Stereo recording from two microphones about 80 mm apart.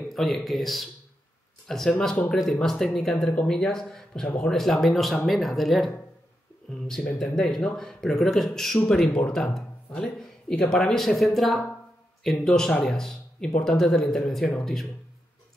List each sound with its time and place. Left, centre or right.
0.1 s speech: centre
1.9 s speech: centre
7.2 s speech: centre
9.8 s speech: centre